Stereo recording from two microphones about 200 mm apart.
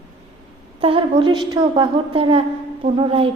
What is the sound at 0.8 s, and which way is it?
A woman's voice, 25° right (ahead or behind).